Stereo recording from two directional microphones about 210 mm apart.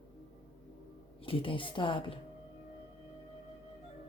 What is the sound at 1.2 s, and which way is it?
Speech, 25° left (ahead or behind).